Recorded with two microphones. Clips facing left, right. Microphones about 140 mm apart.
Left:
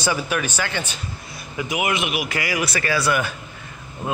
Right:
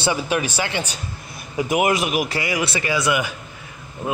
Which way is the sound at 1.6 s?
45° right (ahead or behind).